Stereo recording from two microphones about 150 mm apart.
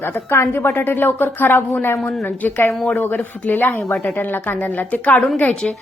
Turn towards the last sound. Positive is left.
turn(degrees=10)  # may be behind; listen again after turning